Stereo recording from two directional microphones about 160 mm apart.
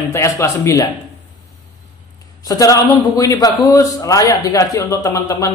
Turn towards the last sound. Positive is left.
turn(degrees=20)  # may be behind; listen again after turning